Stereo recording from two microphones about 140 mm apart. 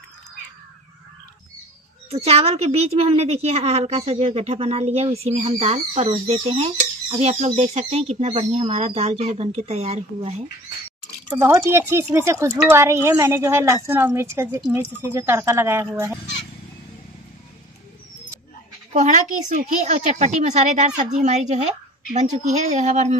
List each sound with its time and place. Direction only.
2.0 s a woman's voice: 45° right (ahead or behind)
11.3 s speech: 20° right (ahead or behind)
18.9 s a woman's voice: 60° right (ahead or behind)